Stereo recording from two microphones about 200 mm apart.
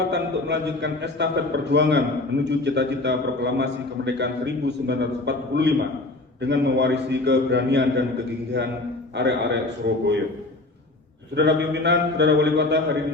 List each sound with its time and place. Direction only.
0.1 s a man's voice: 60° right (ahead or behind)
9.1 s a man's voice: 60° right (ahead or behind)
11.3 s a man's voice: 60° right (ahead or behind)